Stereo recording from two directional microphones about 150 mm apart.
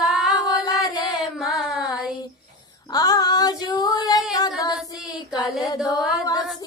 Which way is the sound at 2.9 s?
25° left (ahead or behind).